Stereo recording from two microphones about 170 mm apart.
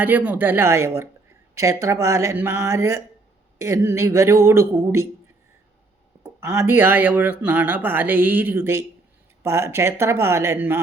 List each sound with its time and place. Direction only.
0.0 s speech: 10° right (ahead or behind)
6.2 s speech: 15° right (ahead or behind)